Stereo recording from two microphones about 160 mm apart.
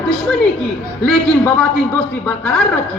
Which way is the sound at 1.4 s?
15° left (ahead or behind).